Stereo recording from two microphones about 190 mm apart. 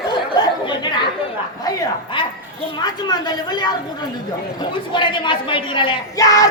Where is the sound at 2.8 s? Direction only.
20° left (ahead or behind).